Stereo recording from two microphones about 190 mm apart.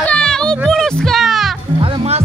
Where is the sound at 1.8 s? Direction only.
30° right (ahead or behind).